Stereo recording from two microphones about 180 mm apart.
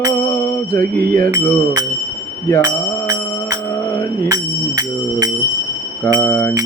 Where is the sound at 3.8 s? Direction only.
10° left (ahead or behind).